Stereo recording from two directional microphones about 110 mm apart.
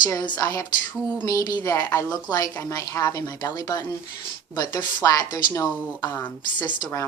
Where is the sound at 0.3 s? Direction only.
30° left (ahead or behind).